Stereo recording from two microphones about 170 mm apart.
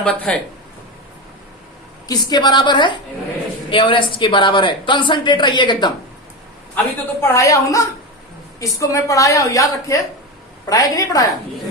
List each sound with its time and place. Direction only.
0.0 s a woman's voice: 5° left (ahead or behind)
2.0 s a woman's voice: 25° left (ahead or behind)
6.7 s a woman's voice: 15° left (ahead or behind)